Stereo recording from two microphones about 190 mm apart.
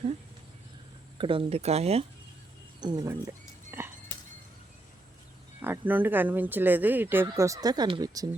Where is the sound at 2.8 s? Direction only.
20° right (ahead or behind).